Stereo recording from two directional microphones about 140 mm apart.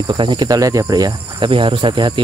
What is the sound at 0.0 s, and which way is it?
Speech, 30° right (ahead or behind).